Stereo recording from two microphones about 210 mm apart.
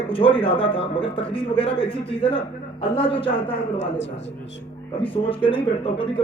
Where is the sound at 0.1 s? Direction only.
25° left (ahead or behind).